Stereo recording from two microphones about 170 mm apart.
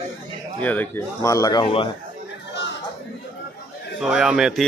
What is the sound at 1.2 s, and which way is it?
Speech, 20° left (ahead or behind).